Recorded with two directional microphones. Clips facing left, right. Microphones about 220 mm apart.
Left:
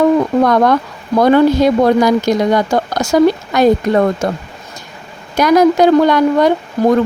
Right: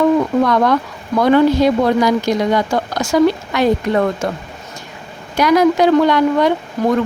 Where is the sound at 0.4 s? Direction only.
45° left (ahead or behind).